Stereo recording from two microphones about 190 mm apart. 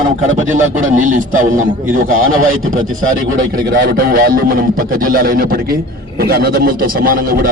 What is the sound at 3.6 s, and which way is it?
A man's voice, 50° right (ahead or behind).